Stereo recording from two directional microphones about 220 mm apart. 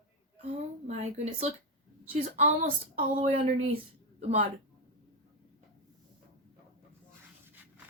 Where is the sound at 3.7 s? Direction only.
30° right (ahead or behind).